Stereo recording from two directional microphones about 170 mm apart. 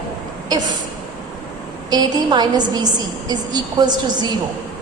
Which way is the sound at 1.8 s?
25° right (ahead or behind).